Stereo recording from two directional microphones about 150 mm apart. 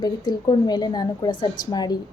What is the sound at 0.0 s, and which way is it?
A woman's voice, 30° left (ahead or behind).